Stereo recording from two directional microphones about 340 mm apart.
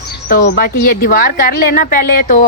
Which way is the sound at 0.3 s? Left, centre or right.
Left.